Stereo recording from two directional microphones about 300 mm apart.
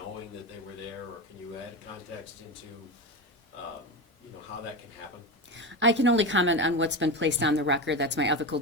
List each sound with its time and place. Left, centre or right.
5.5 s a woman's voice: right